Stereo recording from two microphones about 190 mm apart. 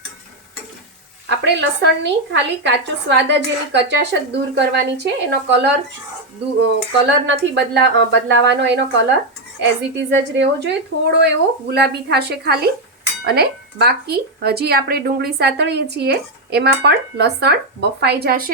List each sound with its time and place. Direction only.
1.5 s speech: 65° right (ahead or behind)